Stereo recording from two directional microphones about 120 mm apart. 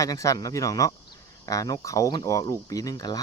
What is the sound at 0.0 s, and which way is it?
Speech, 30° left (ahead or behind).